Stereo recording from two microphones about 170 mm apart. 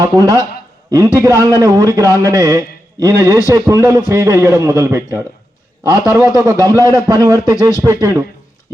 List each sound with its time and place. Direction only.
0.0 s a man's voice: 20° right (ahead or behind)